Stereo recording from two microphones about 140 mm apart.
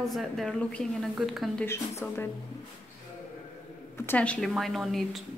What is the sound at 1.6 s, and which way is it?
Speech, 15° left (ahead or behind).